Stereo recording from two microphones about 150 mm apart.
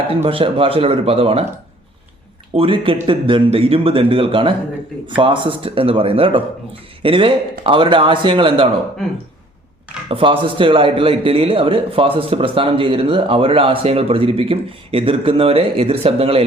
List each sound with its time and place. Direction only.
0.1 s a man's voice: 40° right (ahead or behind)
2.5 s a man's voice: 40° right (ahead or behind)
10.1 s a man's voice: 35° right (ahead or behind)